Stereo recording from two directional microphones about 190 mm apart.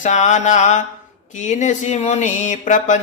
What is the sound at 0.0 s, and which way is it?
Speech, 40° left (ahead or behind).